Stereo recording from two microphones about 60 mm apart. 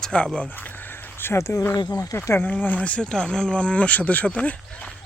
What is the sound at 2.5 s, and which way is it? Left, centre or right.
Speech, left.